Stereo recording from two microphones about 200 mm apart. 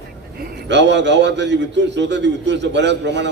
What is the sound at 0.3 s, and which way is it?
A man's voice, 55° right (ahead or behind).